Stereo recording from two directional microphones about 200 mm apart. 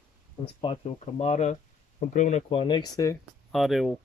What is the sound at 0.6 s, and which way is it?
Speech, 30° left (ahead or behind).